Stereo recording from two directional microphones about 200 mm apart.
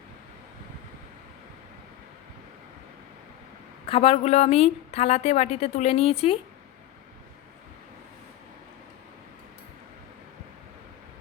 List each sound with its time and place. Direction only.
3.8 s a woman's voice: 30° left (ahead or behind)